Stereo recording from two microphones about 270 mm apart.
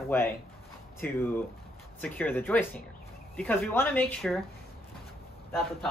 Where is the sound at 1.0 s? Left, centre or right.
Centre.